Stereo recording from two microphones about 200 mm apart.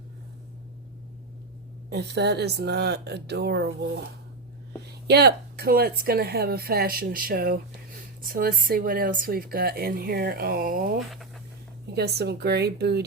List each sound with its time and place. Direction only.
1.9 s speech: 55° right (ahead or behind)
11.0 s speech: centre (ahead or behind)
11.9 s speech: 55° right (ahead or behind)